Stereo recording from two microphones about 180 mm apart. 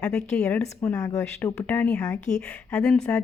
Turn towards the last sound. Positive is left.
turn(degrees=5)  # may be behind; listen again after turning